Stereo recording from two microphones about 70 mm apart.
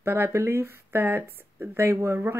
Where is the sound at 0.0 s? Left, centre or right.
Right.